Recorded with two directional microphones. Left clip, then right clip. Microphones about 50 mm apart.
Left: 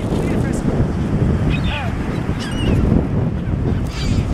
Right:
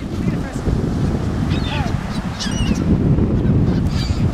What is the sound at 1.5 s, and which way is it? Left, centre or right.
Boat, right.